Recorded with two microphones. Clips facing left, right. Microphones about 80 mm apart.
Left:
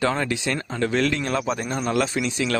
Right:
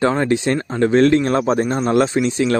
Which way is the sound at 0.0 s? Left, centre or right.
Right.